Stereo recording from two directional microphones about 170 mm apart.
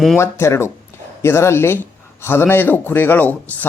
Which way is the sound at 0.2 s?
15° left (ahead or behind).